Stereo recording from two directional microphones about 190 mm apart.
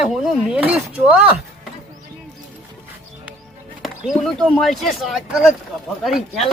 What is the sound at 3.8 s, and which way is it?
Speech, centre (ahead or behind).